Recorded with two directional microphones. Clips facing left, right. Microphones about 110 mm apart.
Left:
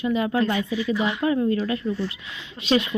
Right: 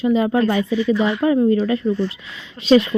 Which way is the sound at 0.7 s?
10° left (ahead or behind).